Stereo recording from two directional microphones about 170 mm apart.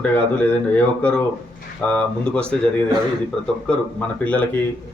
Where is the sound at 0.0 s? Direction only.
10° left (ahead or behind).